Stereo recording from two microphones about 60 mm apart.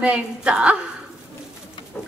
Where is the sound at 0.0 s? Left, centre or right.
Centre.